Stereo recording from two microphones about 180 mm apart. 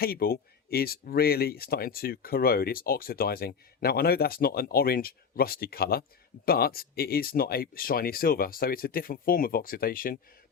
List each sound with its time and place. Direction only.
0.0 s speech: 55° left (ahead or behind)